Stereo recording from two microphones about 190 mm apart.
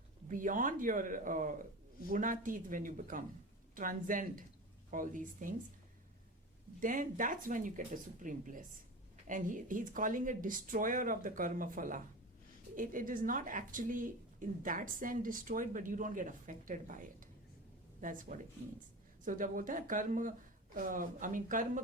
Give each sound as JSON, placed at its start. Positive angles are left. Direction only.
{"t": 0.3, "sound": "speech", "side_deg": -45}
{"t": 6.7, "sound": "speech", "side_deg": -45}